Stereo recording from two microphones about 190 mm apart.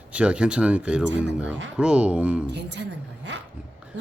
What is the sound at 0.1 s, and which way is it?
Speech, 5° right (ahead or behind).